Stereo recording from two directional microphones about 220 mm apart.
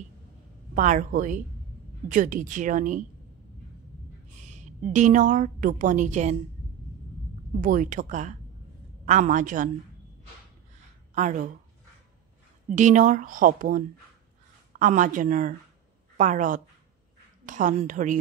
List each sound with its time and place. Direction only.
0.7 s a woman's voice: 35° right (ahead or behind)
4.4 s a sound: 35° right (ahead or behind)
4.9 s a woman's voice: 35° right (ahead or behind)
7.6 s a woman's voice: 35° right (ahead or behind)
11.1 s a woman's voice: 35° right (ahead or behind)
12.7 s a woman's voice: 35° right (ahead or behind)